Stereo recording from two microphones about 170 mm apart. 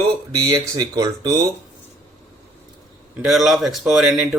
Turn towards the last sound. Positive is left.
turn(degrees=-5)  # may be behind; listen again after turning